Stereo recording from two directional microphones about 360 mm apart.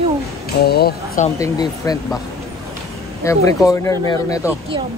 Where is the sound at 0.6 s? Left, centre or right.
Left.